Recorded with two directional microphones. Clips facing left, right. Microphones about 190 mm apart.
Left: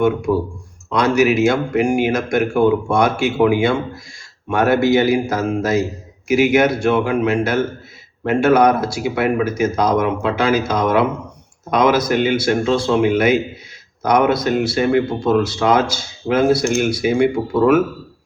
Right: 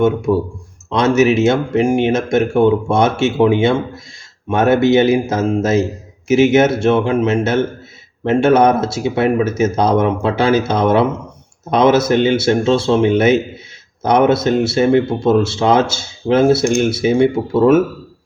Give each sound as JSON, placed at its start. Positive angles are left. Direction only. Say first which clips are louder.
{"t": 0.3, "sound": "speech", "louder": "right 2 dB", "side_deg": -25}